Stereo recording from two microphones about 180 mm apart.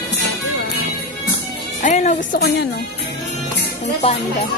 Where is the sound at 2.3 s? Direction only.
65° left (ahead or behind).